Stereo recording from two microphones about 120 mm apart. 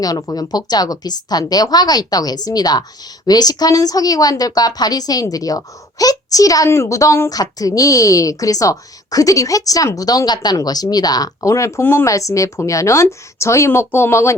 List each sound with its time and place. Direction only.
0.0 s a woman's voice: 30° left (ahead or behind)